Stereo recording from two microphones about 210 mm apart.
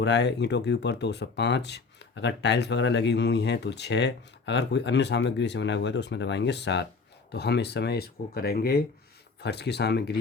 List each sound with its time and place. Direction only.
0.0 s speech: 55° left (ahead or behind)